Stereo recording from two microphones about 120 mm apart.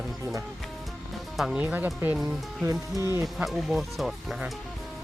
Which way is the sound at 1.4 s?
5° right (ahead or behind).